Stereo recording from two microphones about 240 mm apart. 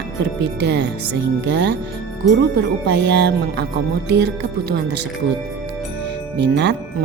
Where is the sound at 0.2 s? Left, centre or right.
Right.